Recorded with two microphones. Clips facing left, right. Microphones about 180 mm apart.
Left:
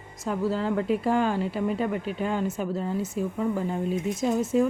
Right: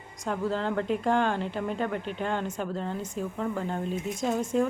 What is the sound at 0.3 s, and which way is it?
Speech, 5° left (ahead or behind).